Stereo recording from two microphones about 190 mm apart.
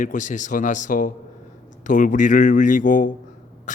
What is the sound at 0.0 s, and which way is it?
A man's voice, 40° left (ahead or behind).